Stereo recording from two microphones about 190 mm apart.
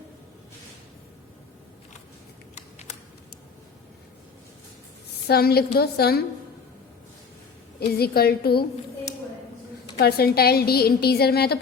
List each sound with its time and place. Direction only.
2.6 s a sound: 35° left (ahead or behind)
5.3 s a woman's voice: 55° left (ahead or behind)
7.8 s a woman's voice: 55° left (ahead or behind)
10.0 s a woman's voice: 55° left (ahead or behind)